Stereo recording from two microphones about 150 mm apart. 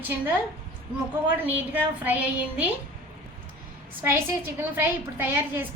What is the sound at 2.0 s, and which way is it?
Speech, 10° right (ahead or behind).